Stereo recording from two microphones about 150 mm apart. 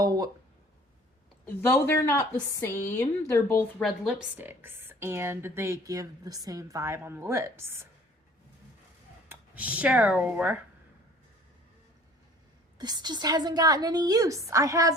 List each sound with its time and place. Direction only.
0.0 s speech: 25° right (ahead or behind)
1.5 s speech: 15° left (ahead or behind)
3.8 s speech: 5° right (ahead or behind)
9.3 s speech: 10° right (ahead or behind)
12.8 s a woman's voice: 30° right (ahead or behind)